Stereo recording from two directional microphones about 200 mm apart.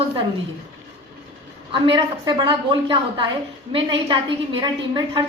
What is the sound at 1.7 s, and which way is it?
A woman's voice, 25° right (ahead or behind).